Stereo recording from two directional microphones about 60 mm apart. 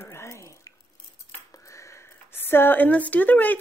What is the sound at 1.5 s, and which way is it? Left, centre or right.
Speech, left.